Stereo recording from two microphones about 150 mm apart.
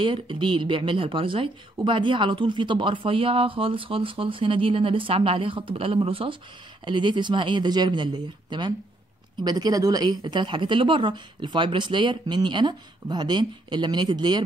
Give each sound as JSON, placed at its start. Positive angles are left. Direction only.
{"t": 0.0, "sound": "speech", "side_deg": -35}